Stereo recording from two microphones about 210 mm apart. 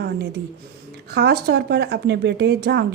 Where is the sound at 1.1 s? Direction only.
50° right (ahead or behind).